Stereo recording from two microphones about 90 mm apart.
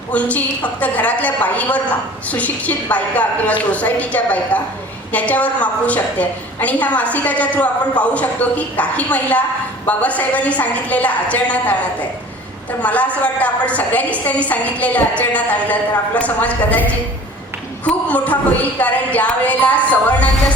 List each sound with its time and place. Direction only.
0.1 s a woman's voice: 15° left (ahead or behind)
12.8 s a woman's voice: 15° left (ahead or behind)
17.8 s a woman's voice: 15° left (ahead or behind)